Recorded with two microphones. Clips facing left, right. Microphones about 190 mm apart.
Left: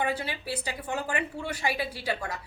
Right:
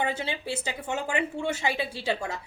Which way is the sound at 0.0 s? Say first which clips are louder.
Right 1 dB; 25° right (ahead or behind).